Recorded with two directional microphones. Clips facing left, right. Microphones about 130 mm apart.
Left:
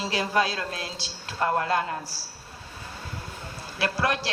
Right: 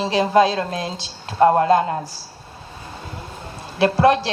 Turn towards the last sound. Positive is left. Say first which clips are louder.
# right 11 dB
turn(degrees=-25)  # may be behind; listen again after turning